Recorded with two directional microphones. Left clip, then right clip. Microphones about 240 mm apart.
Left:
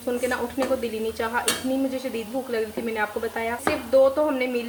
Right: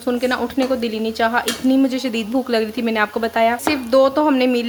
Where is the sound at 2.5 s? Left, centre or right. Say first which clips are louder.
Right 7 dB; right.